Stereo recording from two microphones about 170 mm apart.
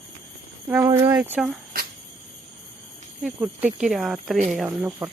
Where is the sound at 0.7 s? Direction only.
15° right (ahead or behind).